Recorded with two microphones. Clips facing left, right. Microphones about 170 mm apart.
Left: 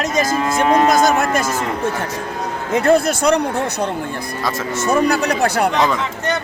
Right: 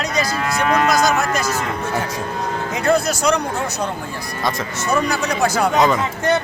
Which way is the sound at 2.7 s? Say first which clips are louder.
Left 4 dB; 55° left (ahead or behind).